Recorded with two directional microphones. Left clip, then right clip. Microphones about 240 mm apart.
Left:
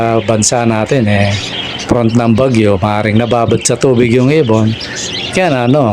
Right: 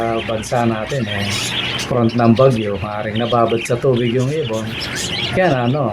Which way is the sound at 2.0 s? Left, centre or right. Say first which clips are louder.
Left 1 dB; left.